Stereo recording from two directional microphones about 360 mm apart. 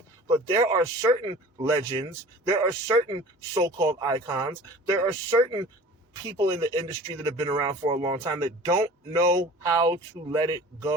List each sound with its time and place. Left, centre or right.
0.3 s speech: centre